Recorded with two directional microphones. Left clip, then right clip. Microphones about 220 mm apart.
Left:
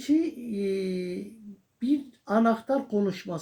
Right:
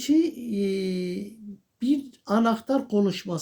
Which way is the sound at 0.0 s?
45° right (ahead or behind).